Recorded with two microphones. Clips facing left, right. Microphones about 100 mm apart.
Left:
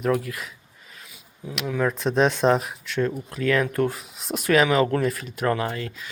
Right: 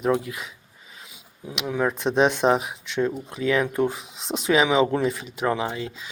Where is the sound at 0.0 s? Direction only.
20° right (ahead or behind).